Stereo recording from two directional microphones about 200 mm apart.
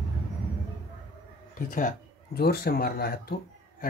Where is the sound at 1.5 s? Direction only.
45° left (ahead or behind).